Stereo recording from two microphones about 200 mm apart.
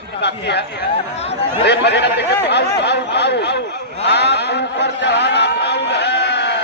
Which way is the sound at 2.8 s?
60° left (ahead or behind).